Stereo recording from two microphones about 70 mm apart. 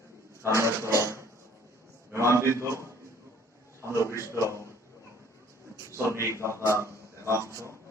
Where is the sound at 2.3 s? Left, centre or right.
Right.